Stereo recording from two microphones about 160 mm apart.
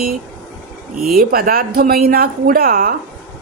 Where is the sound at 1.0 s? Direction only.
65° right (ahead or behind).